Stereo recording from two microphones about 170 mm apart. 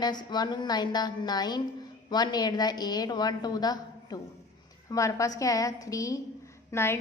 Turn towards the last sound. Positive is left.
turn(degrees=15)  # may be behind; listen again after turning